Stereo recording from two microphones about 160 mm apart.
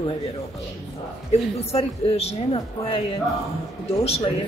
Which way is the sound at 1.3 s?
40° left (ahead or behind).